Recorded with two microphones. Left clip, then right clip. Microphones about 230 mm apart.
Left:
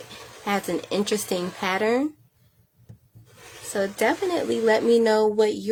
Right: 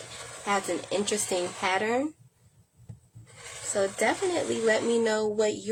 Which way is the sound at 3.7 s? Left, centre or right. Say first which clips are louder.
Left 3 dB; left.